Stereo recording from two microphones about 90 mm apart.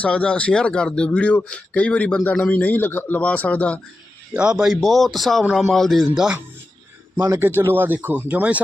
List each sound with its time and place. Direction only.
0.0 s speech: 15° left (ahead or behind)
4.4 s speech: 10° right (ahead or behind)
7.2 s speech: 30° right (ahead or behind)